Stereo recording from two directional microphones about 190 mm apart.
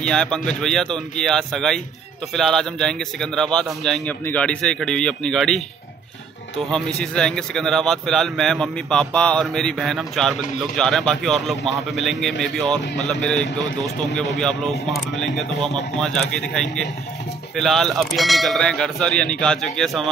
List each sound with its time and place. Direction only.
0.0 s a man's voice: 5° left (ahead or behind)
6.7 s a man's voice: 5° left (ahead or behind)